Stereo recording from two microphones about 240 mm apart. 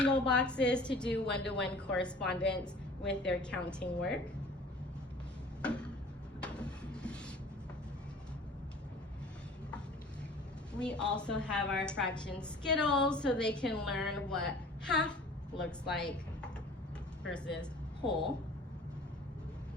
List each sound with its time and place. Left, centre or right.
0.0 s a woman's voice: centre
1.3 s a woman's voice: left
2.0 s a woman's voice: centre
5.6 s tick-tock: centre
6.4 s a sound: centre
10.8 s a woman's voice: centre